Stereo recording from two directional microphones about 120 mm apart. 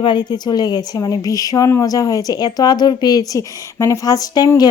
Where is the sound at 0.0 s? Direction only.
40° left (ahead or behind).